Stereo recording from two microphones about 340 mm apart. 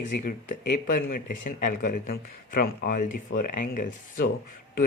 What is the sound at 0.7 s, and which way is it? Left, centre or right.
Speech, left.